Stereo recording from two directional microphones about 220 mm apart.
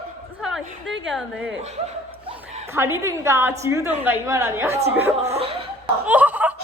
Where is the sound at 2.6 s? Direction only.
10° right (ahead or behind).